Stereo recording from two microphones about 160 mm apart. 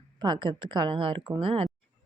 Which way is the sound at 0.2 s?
30° right (ahead or behind).